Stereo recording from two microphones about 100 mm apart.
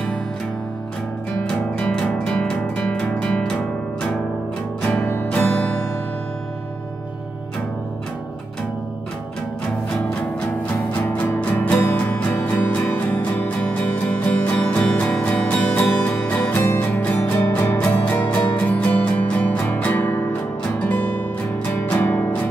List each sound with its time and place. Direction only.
1.4 s music: 10° left (ahead or behind)
4.8 s music: 20° left (ahead or behind)
10.9 s music: 20° left (ahead or behind)
16.5 s music: 25° left (ahead or behind)